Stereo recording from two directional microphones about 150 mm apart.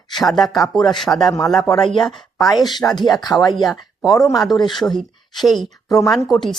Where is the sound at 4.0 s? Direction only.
Centre (ahead or behind).